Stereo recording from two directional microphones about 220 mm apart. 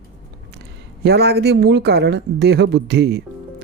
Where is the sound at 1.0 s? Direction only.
45° right (ahead or behind).